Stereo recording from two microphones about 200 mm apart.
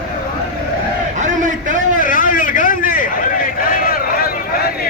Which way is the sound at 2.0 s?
45° left (ahead or behind).